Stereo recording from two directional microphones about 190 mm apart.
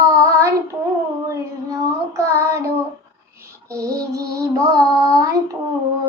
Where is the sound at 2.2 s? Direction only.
15° right (ahead or behind).